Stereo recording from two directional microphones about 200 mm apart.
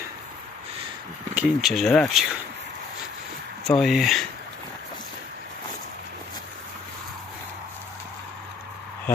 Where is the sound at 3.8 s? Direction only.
Centre (ahead or behind).